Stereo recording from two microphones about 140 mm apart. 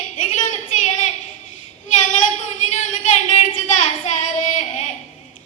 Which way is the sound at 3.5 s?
60° left (ahead or behind).